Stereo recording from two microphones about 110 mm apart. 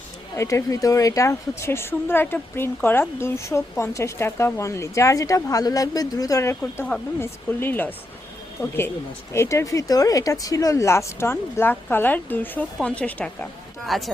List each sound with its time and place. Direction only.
0.3 s a woman's voice: 30° left (ahead or behind)
13.8 s speech: centre (ahead or behind)